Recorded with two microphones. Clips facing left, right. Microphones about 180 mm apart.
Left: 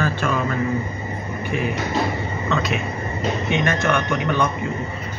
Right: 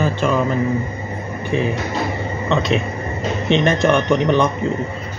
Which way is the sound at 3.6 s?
30° right (ahead or behind).